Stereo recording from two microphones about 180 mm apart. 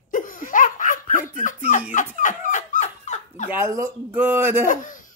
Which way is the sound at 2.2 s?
45° left (ahead or behind).